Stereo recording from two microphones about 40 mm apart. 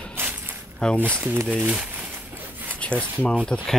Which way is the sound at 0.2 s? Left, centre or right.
Right.